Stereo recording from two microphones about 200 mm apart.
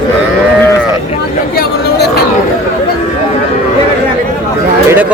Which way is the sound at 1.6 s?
50° left (ahead or behind).